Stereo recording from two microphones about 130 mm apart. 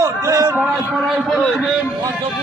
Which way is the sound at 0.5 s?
5° right (ahead or behind).